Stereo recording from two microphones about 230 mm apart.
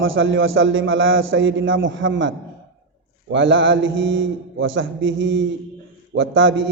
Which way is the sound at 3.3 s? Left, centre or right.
Right.